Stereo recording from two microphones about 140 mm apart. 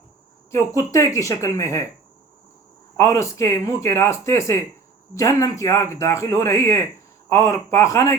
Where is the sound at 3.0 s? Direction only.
20° left (ahead or behind).